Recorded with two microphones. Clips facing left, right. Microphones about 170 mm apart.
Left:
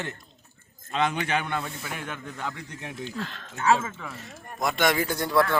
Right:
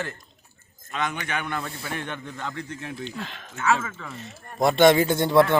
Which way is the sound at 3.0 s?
20° right (ahead or behind).